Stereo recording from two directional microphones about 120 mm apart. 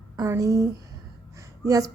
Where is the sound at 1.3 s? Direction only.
25° right (ahead or behind).